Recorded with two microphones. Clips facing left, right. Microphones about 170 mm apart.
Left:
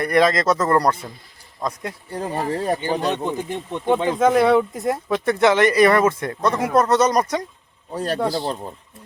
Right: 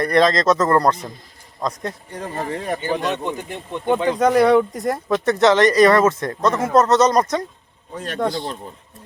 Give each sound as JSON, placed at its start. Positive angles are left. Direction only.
{"t": 0.0, "sound": "speech", "side_deg": 10}
{"t": 2.5, "sound": "speech", "side_deg": 35}
{"t": 3.8, "sound": "speech", "side_deg": 0}
{"t": 7.9, "sound": "speech", "side_deg": 35}